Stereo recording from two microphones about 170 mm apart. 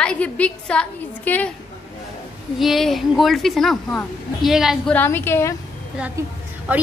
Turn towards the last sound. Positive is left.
turn(degrees=-10)  # may be behind; listen again after turning